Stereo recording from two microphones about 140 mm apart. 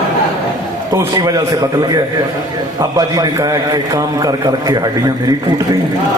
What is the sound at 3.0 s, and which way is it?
A man's voice, 25° right (ahead or behind).